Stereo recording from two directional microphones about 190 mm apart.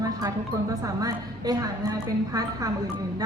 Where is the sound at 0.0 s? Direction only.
20° right (ahead or behind).